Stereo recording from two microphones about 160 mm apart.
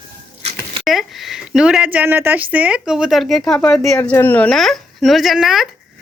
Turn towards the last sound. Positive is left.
turn(degrees=0)  # may be behind; listen again after turning